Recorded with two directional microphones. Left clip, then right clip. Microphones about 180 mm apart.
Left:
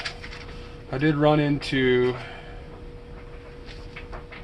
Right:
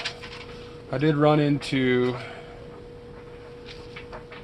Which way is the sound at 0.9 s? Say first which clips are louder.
Even; 35° right (ahead or behind).